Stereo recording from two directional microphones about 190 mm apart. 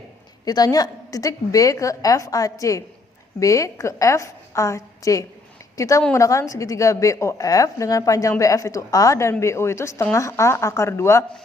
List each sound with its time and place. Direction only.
0.4 s a woman's voice: 20° left (ahead or behind)
6.0 s a woman's voice: 5° left (ahead or behind)
6.2 s a woman's voice: 15° left (ahead or behind)